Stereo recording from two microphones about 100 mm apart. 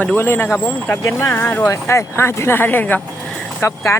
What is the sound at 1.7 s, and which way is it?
Speech, 25° left (ahead or behind).